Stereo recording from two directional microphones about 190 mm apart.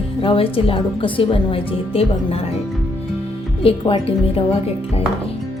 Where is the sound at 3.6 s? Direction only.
30° left (ahead or behind).